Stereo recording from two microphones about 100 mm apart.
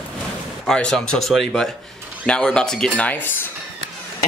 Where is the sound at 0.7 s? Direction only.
5° left (ahead or behind).